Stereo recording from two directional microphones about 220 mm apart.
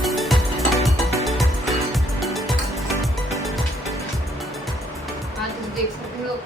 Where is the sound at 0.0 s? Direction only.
Centre (ahead or behind).